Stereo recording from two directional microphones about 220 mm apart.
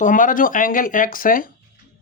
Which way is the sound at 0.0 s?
35° left (ahead or behind).